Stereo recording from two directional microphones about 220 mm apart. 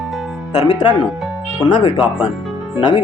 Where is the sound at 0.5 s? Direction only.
25° left (ahead or behind).